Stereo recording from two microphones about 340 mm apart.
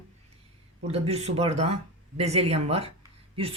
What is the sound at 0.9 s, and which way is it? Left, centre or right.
Speech, centre.